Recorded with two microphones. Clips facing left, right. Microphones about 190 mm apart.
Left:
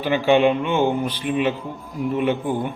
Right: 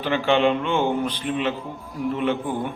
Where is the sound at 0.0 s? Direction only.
10° left (ahead or behind).